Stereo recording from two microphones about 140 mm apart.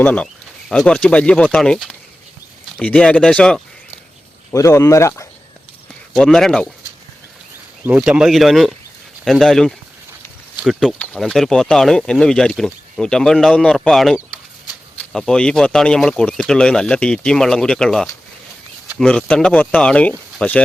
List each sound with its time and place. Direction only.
0.0 s speech: 10° left (ahead or behind)
4.5 s speech: 20° left (ahead or behind)
6.1 s speech: 5° left (ahead or behind)
7.9 s speech: 10° right (ahead or behind); by 20.6 s 10° left (ahead or behind)